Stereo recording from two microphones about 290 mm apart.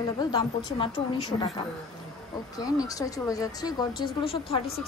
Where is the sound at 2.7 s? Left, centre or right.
Centre.